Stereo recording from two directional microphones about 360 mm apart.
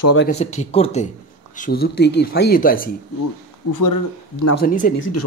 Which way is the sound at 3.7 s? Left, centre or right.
Left.